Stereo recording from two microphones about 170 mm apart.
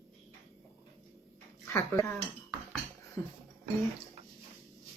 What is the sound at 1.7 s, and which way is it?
Speech, 15° left (ahead or behind).